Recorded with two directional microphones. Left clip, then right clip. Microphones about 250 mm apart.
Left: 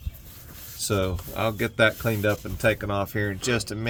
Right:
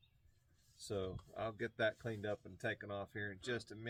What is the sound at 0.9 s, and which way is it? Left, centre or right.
Speech, left.